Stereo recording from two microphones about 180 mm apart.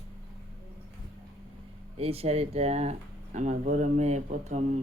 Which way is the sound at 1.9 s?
35° right (ahead or behind).